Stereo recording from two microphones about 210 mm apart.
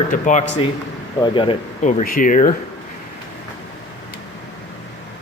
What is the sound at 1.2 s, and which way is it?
Speech, 25° left (ahead or behind).